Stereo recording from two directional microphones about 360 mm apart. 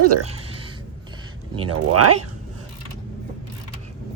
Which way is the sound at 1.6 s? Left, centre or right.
Right.